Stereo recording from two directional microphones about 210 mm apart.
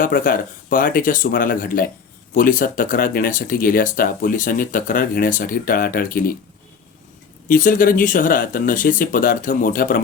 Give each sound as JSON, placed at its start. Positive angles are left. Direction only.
{"t": 0.0, "sound": "speech", "side_deg": 40}
{"t": 7.4, "sound": "speech", "side_deg": 40}